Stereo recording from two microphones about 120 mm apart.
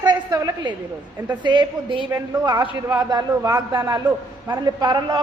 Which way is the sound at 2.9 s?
30° right (ahead or behind).